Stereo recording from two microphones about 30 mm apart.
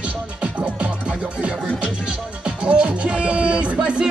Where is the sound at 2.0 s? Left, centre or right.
Right.